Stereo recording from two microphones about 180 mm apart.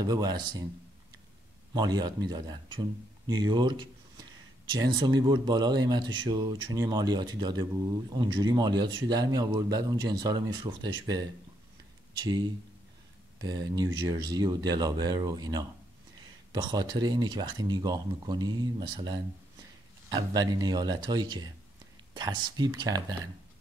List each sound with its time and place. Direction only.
0.0 s speech: 20° right (ahead or behind)
1.7 s speech: 25° right (ahead or behind)